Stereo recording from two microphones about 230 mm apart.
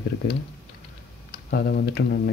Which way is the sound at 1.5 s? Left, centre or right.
Left.